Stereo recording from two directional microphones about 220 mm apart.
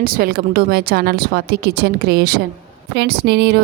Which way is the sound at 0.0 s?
40° right (ahead or behind).